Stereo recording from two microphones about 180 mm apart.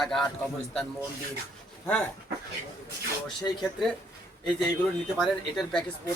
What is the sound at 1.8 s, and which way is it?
Speech, 5° left (ahead or behind).